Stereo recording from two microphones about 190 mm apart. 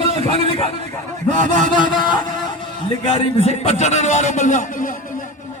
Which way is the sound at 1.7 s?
25° left (ahead or behind).